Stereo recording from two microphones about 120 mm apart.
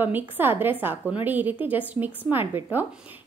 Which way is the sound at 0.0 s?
15° right (ahead or behind).